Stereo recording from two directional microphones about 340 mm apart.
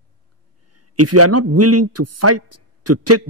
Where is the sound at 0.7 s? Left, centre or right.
Right.